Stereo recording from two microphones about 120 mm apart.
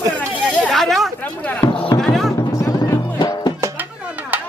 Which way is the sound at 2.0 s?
Centre (ahead or behind).